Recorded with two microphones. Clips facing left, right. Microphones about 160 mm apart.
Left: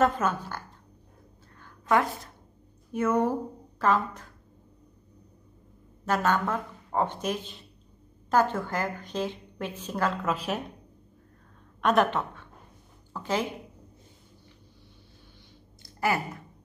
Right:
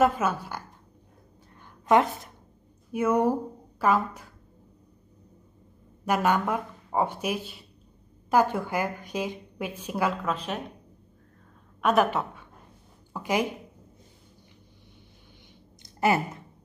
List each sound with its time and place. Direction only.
0.0 s speech: 10° right (ahead or behind)
1.6 s a sound: 20° right (ahead or behind)
2.9 s speech: 10° right (ahead or behind)
6.0 s speech: 10° right (ahead or behind)
10.2 s a woman's voice: 5° left (ahead or behind)
11.8 s a woman's voice: 5° right (ahead or behind)
15.8 s a sound: 20° right (ahead or behind)